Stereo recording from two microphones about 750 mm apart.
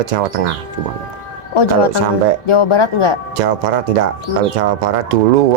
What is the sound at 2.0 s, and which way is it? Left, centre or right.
Speech, right.